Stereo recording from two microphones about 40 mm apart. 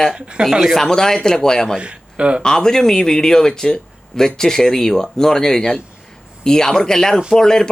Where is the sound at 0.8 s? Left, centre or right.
Centre.